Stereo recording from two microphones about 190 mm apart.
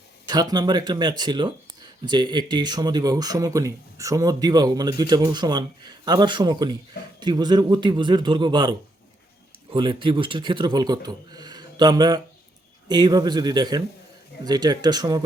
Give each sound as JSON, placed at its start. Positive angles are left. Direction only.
{"t": 0.3, "sound": "speech", "side_deg": -20}
{"t": 9.7, "sound": "speech", "side_deg": -25}